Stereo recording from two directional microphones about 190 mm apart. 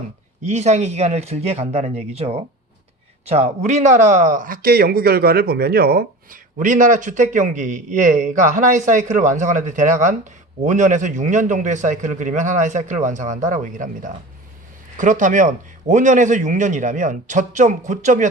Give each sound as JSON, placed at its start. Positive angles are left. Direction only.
{"t": 0.4, "sound": "a man's voice", "side_deg": -35}